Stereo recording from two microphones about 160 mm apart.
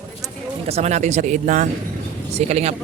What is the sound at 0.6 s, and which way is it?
Speech, 40° right (ahead or behind).